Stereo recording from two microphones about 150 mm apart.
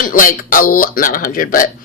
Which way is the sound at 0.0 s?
65° left (ahead or behind).